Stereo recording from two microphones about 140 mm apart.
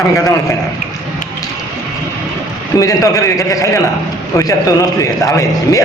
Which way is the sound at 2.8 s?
25° left (ahead or behind).